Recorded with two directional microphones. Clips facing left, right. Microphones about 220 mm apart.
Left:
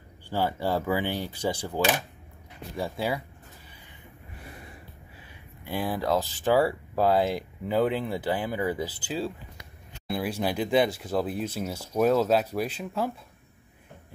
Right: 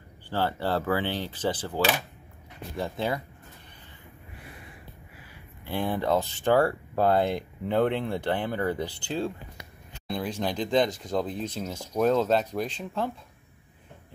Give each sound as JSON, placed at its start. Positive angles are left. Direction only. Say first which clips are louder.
{"t": 0.3, "sound": "speech", "louder": "even", "side_deg": 10}
{"t": 5.7, "sound": "speech", "louder": "right 1 dB", "side_deg": 5}